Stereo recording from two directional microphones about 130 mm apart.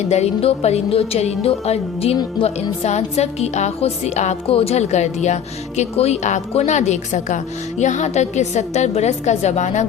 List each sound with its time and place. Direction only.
0.1 s a woman's voice: 55° left (ahead or behind)